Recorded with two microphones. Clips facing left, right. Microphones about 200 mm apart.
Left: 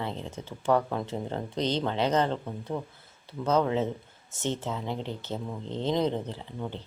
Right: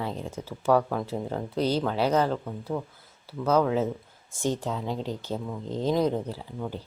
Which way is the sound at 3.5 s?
5° right (ahead or behind).